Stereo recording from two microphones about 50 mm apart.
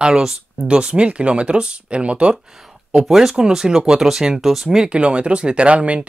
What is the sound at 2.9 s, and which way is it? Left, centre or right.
Speech, centre.